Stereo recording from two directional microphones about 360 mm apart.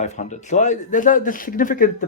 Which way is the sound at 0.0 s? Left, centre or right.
Centre.